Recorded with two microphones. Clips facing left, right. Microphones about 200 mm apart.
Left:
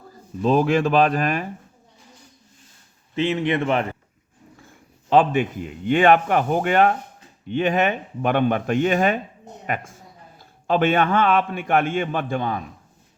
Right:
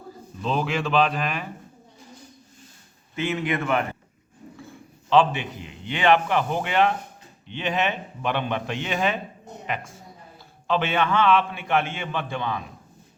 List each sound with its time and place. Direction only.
0.4 s a man's voice: 45° left (ahead or behind)
3.2 s speech: 30° left (ahead or behind)
5.0 s a man's voice: 50° left (ahead or behind)